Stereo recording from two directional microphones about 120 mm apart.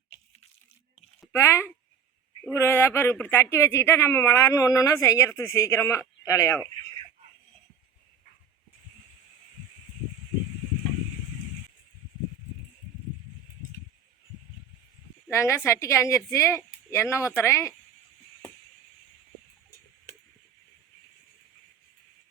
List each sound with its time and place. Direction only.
1.3 s speech: 20° left (ahead or behind)
15.3 s speech: 25° left (ahead or behind)